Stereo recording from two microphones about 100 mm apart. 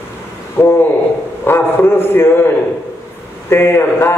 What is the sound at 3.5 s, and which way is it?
Speech, 25° left (ahead or behind).